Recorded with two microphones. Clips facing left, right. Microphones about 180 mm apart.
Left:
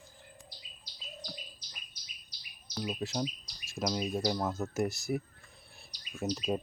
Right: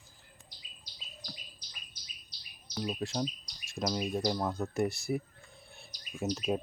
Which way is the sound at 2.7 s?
Centre (ahead or behind).